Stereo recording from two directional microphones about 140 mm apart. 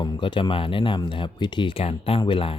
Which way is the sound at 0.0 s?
30° left (ahead or behind).